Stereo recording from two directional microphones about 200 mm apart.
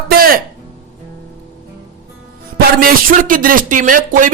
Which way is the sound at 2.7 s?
45° right (ahead or behind).